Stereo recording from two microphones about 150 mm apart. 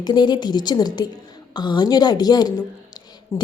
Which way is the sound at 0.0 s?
30° left (ahead or behind).